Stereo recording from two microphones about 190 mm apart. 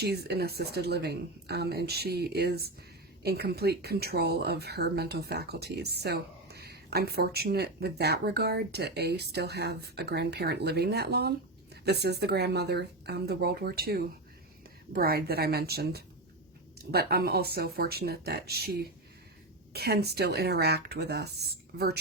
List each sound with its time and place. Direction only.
0.0 s speech: 55° right (ahead or behind)